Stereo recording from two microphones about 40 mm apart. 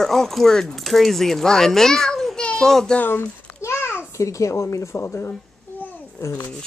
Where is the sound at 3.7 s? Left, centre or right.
Left.